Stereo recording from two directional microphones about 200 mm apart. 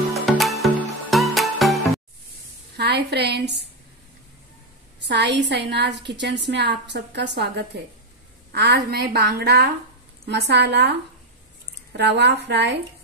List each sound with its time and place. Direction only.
0.1 s music: centre (ahead or behind)
2.8 s a woman's voice: 55° right (ahead or behind)
5.0 s a woman's voice: 60° right (ahead or behind)
12.0 s a woman's voice: 60° right (ahead or behind)